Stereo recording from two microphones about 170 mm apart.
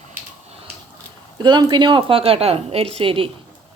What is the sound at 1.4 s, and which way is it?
A woman's voice, 25° right (ahead or behind).